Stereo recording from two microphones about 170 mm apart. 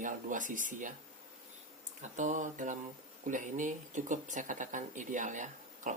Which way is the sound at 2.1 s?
45° right (ahead or behind).